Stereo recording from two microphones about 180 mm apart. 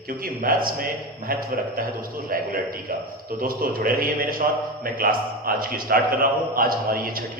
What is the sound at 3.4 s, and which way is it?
A man's voice, 50° right (ahead or behind).